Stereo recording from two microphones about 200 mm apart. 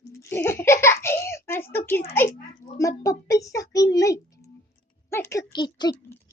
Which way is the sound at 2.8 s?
15° left (ahead or behind).